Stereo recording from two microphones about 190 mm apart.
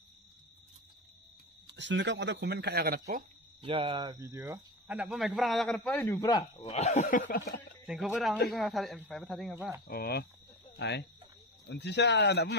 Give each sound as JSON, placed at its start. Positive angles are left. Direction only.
{"t": 1.7, "sound": "speech", "side_deg": -70}
{"t": 3.6, "sound": "speech", "side_deg": -25}
{"t": 6.0, "sound": "speech", "side_deg": 15}
{"t": 6.7, "sound": "speech", "side_deg": 35}
{"t": 7.8, "sound": "speech", "side_deg": -5}
{"t": 9.8, "sound": "speech", "side_deg": 55}